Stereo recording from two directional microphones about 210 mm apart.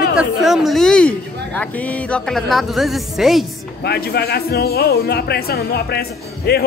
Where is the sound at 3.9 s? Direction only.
50° left (ahead or behind).